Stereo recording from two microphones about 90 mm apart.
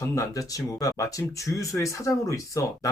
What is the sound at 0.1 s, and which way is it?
Speech, 35° left (ahead or behind).